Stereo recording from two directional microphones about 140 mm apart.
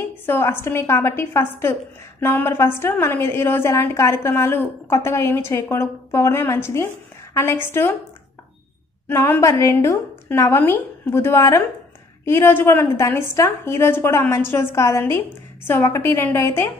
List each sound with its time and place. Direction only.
0.3 s a woman's voice: 15° left (ahead or behind)
9.1 s a woman's voice: 20° left (ahead or behind)